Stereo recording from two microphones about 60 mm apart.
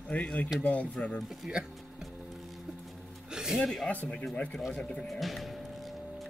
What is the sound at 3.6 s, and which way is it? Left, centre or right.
Speech, centre.